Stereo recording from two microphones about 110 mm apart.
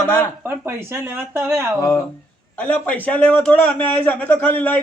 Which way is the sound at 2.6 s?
15° left (ahead or behind).